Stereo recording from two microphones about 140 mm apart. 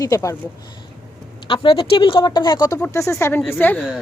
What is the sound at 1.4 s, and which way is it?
A woman's voice, 35° left (ahead or behind).